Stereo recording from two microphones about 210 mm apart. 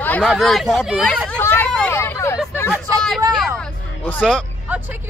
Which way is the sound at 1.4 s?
10° left (ahead or behind).